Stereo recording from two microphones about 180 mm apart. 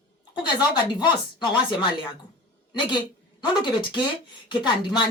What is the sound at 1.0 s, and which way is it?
Speech, 25° left (ahead or behind).